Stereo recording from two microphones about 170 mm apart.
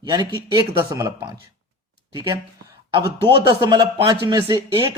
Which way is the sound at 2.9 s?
25° right (ahead or behind).